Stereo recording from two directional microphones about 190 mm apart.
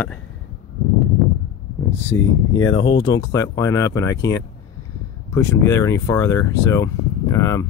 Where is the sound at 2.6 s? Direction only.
90° left.